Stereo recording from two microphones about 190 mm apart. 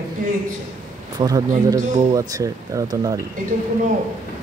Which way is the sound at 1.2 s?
20° right (ahead or behind).